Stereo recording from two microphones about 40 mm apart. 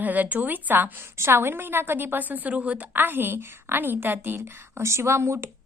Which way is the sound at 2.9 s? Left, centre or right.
Right.